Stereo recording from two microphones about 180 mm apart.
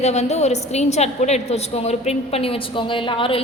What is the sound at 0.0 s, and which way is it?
A woman's voice, 35° left (ahead or behind).